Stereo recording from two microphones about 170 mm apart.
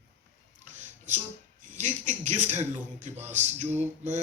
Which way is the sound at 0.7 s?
45° right (ahead or behind).